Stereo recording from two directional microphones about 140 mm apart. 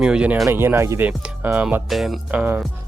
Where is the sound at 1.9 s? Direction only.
Centre (ahead or behind).